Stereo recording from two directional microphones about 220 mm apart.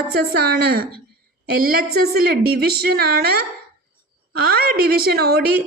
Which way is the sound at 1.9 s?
45° right (ahead or behind).